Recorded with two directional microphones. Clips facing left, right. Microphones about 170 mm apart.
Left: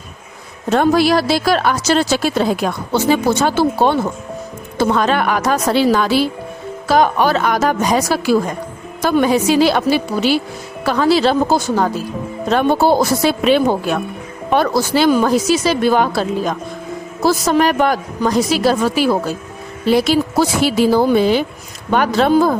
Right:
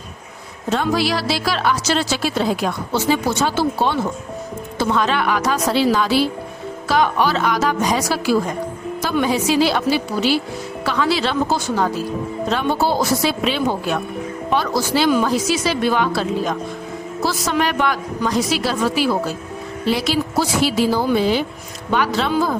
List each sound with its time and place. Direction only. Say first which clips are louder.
0.7 s a woman's voice: left 6 dB; 50° left (ahead or behind)